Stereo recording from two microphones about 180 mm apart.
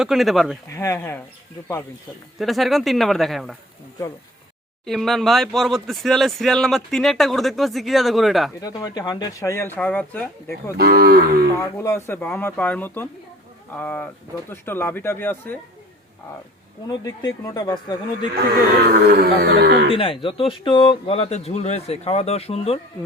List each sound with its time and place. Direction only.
0.0 s speech: centre (ahead or behind)
0.7 s speech: 15° left (ahead or behind)
2.4 s speech: centre (ahead or behind)
4.9 s speech: centre (ahead or behind)
8.6 s speech: 20° left (ahead or behind)
10.8 s speech: 60° right (ahead or behind)
11.6 s speech: 15° left (ahead or behind)
17.0 s speech: 20° left (ahead or behind)
18.9 s speech: 60° right (ahead or behind)
19.9 s speech: 30° left (ahead or behind)